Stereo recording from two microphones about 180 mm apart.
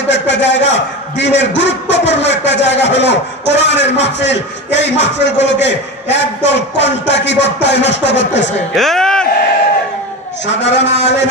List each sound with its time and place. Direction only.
0.1 s a man's voice: 80° left
8.7 s speech: centre (ahead or behind)
10.5 s a man's voice: 75° left (ahead or behind)